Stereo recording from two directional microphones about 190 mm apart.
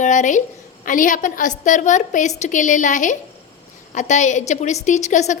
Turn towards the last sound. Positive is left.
turn(degrees=40)  # may be behind; listen again after turning